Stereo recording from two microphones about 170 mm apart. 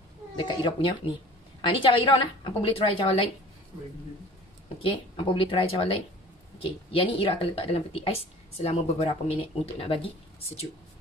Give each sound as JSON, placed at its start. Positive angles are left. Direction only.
{"t": 0.4, "sound": "a woman's voice", "side_deg": 25}
{"t": 4.8, "sound": "speech", "side_deg": 30}
{"t": 6.9, "sound": "speech", "side_deg": 35}